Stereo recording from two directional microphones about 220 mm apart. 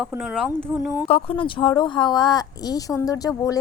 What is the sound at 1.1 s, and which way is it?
A woman's voice, 25° left (ahead or behind).